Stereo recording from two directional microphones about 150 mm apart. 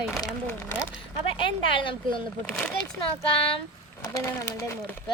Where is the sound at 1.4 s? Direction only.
35° left (ahead or behind).